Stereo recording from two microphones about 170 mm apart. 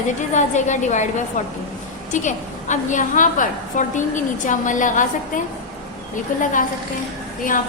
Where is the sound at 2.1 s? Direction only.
45° left (ahead or behind).